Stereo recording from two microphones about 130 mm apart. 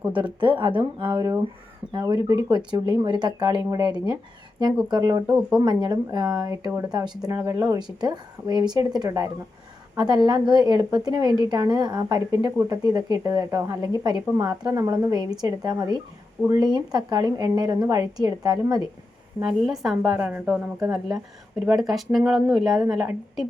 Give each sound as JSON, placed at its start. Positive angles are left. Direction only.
{"t": 0.1, "sound": "a woman's voice", "side_deg": -40}
{"t": 19.4, "sound": "speech", "side_deg": -5}
{"t": 21.7, "sound": "speech", "side_deg": 0}